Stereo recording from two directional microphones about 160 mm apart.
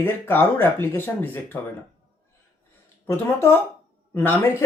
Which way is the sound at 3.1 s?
15° left (ahead or behind).